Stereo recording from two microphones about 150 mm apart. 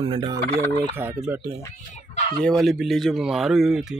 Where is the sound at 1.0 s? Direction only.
15° right (ahead or behind).